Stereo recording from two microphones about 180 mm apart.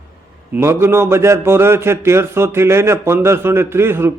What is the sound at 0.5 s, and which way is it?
A man's voice, 15° right (ahead or behind).